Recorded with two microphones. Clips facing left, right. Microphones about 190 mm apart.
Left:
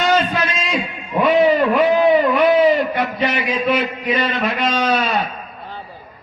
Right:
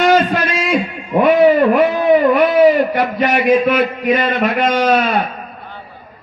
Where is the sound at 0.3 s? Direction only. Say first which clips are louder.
Right 5 dB; 50° right (ahead or behind).